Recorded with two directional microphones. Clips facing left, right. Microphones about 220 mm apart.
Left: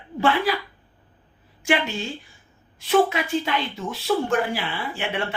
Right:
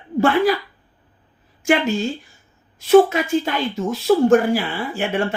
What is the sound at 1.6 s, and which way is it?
A woman's voice, 45° right (ahead or behind).